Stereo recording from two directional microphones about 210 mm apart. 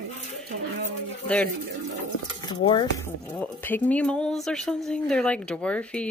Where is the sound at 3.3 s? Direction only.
5° left (ahead or behind).